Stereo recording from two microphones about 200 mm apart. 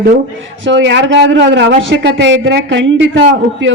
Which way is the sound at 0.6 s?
65° right (ahead or behind).